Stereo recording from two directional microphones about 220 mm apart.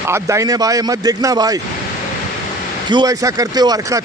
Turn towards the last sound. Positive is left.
turn(degrees=-15)  # may be behind; listen again after turning